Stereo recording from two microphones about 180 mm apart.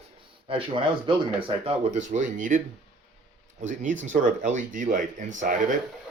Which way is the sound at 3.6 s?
45° right (ahead or behind).